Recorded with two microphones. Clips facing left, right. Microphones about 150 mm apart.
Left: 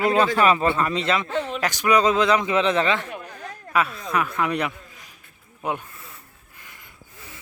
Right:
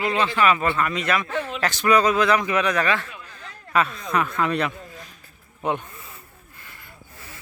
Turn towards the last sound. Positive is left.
turn(degrees=5)  # may be behind; listen again after turning